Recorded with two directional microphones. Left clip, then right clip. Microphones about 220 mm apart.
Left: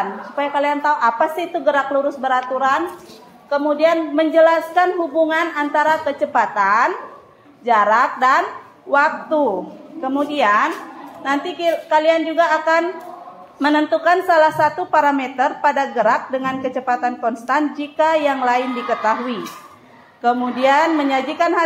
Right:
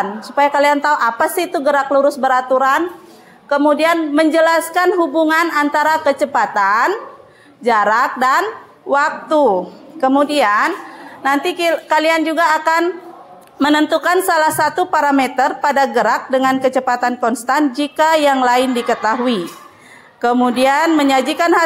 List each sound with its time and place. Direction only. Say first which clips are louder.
0.4 s a woman's voice: right 6 dB; 55° right (ahead or behind)